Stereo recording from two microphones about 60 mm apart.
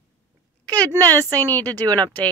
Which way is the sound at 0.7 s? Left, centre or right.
Right.